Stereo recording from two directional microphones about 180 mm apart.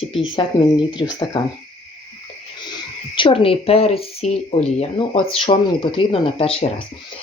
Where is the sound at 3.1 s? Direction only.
30° left (ahead or behind).